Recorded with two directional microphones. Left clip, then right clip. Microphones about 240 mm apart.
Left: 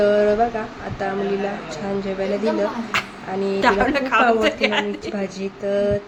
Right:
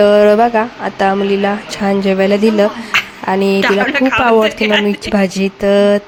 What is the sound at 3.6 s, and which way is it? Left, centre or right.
Speech, centre.